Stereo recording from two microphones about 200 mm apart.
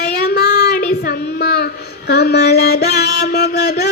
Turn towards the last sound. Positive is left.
turn(degrees=55)  # may be behind; listen again after turning